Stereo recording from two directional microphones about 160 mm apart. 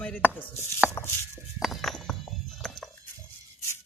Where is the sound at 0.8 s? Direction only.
5° right (ahead or behind).